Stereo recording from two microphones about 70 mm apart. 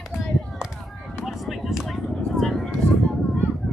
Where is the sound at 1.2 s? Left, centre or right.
Centre.